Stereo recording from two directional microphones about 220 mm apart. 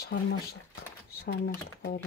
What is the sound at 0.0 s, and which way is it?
Speech, 50° left (ahead or behind).